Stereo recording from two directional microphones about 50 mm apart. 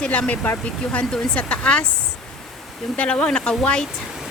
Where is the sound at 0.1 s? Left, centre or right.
Left.